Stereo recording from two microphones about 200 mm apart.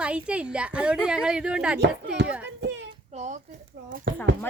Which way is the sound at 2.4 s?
60° right (ahead or behind).